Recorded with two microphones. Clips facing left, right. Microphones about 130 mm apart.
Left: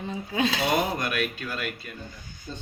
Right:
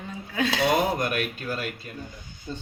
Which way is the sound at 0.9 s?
40° right (ahead or behind).